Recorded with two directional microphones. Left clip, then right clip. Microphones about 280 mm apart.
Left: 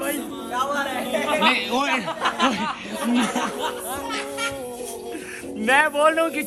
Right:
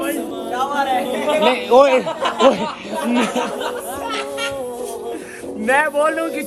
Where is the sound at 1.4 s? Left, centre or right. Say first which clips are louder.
Right 11 dB; centre.